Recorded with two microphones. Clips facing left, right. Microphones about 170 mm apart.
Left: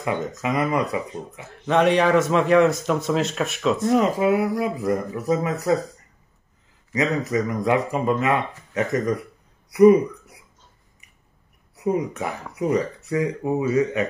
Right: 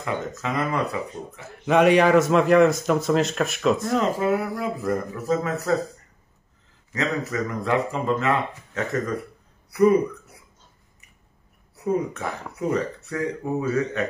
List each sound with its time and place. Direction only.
0.0 s speech: 15° left (ahead or behind)
1.7 s a man's voice: 5° right (ahead or behind)
3.9 s speech: 15° left (ahead or behind)
6.9 s speech: 15° left (ahead or behind)
11.7 s speech: 15° left (ahead or behind)